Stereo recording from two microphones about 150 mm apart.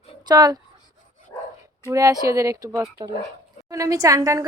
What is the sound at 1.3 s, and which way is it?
Dog, 20° left (ahead or behind).